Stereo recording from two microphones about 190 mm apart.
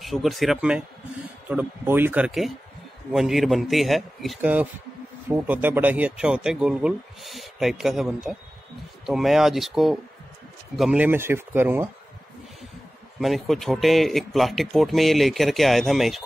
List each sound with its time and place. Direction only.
0.0 s speech: centre (ahead or behind)
13.2 s speech: centre (ahead or behind)